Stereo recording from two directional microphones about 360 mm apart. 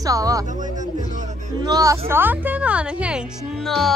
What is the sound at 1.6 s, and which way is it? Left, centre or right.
Speech, centre.